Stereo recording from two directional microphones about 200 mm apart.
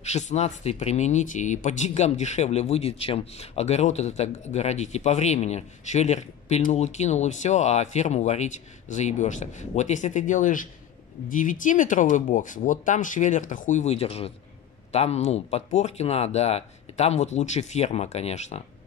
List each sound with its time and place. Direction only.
0.0 s speech: 35° left (ahead or behind)